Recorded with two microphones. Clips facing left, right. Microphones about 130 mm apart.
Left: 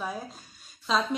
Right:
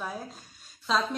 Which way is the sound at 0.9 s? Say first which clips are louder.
Left 1 dB; centre (ahead or behind).